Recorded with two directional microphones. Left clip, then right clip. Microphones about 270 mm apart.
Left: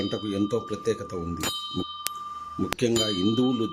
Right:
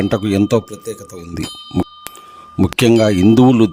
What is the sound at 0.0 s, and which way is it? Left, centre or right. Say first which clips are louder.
Speech: right 12 dB; right.